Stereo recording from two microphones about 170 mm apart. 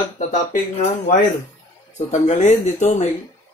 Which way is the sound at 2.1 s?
45° left (ahead or behind).